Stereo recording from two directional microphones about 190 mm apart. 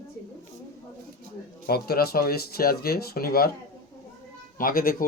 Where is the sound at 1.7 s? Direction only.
55° left (ahead or behind).